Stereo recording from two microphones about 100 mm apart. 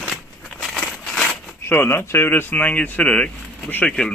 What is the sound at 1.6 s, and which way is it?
Speech, 25° left (ahead or behind).